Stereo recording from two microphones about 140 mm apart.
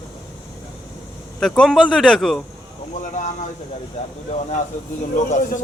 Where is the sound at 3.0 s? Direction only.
60° left (ahead or behind).